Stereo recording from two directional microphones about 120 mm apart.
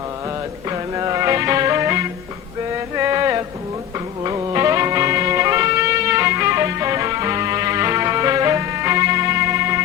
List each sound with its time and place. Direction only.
0.7 s music: 30° right (ahead or behind)